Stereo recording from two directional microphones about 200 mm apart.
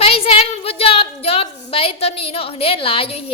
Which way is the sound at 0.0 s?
30° left (ahead or behind).